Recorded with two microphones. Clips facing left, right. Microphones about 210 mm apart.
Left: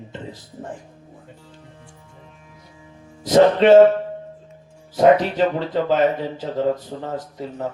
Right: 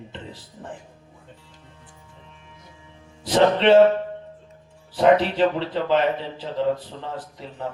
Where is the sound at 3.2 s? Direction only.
45° left (ahead or behind).